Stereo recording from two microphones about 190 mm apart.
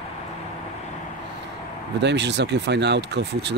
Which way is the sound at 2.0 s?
65° right (ahead or behind).